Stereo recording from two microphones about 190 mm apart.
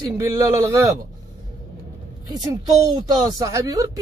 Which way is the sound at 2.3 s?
20° right (ahead or behind).